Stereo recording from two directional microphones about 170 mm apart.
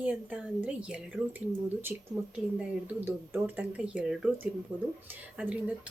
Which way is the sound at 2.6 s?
10° right (ahead or behind).